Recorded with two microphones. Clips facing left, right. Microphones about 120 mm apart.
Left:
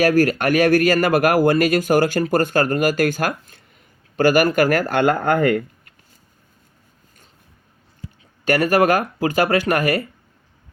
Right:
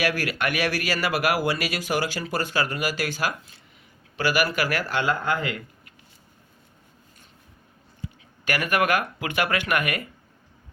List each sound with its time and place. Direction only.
0.0 s speech: 45° left (ahead or behind)
8.4 s speech: 35° left (ahead or behind)